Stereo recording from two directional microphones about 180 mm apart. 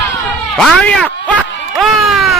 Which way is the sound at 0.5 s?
5° left (ahead or behind).